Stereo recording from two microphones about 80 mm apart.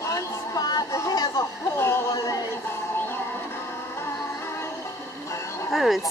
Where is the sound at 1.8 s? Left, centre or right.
Left.